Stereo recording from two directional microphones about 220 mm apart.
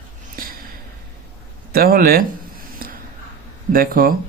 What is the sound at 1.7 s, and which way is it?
Speech, 45° right (ahead or behind).